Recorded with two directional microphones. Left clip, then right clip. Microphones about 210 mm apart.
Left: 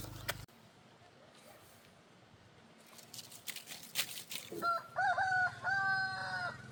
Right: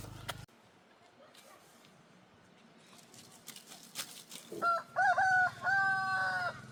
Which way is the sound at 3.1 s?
30° left (ahead or behind).